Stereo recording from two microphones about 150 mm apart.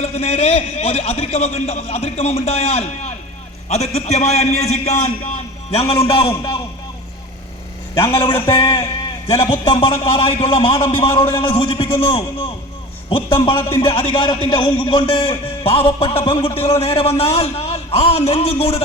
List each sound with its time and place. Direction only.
0.0 s a man's voice: 45° left (ahead or behind)
8.6 s a man's voice: 20° left (ahead or behind)
9.2 s a man's voice: 35° left (ahead or behind)